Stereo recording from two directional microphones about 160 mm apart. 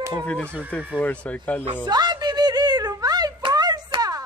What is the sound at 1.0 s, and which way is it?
Speech, 10° left (ahead or behind).